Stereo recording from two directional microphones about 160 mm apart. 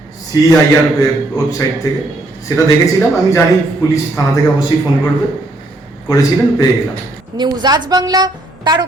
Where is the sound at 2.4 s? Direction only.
20° left (ahead or behind).